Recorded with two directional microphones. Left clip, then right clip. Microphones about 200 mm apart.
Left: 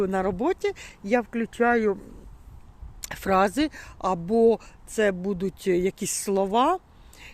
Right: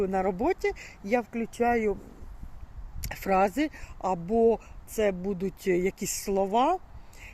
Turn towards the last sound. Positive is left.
turn(degrees=25)  # may be behind; listen again after turning